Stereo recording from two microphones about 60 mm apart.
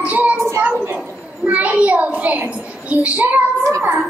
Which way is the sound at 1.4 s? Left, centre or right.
Right.